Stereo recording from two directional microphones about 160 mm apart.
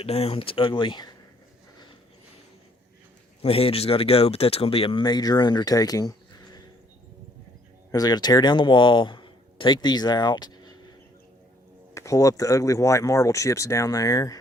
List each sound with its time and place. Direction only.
0.0 s speech: 40° left (ahead or behind)
3.4 s speech: 35° left (ahead or behind)
7.9 s speech: 25° left (ahead or behind)
11.9 s speech: 20° left (ahead or behind)